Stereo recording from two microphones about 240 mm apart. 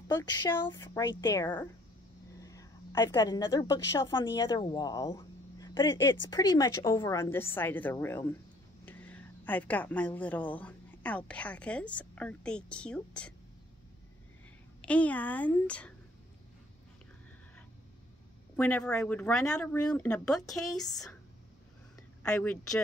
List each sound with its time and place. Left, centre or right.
0.1 s a woman's voice: centre
14.8 s speech: centre
18.6 s speech: centre
22.2 s speech: centre